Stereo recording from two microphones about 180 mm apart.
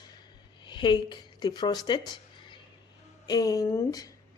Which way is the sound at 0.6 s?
25° left (ahead or behind).